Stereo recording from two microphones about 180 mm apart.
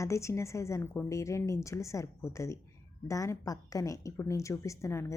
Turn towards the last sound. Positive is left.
turn(degrees=15)  # may be behind; listen again after turning